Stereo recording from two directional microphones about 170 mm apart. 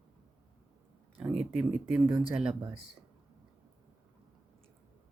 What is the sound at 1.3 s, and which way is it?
Speech, 35° right (ahead or behind).